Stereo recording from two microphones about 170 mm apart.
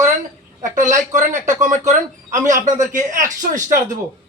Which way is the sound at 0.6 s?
45° right (ahead or behind).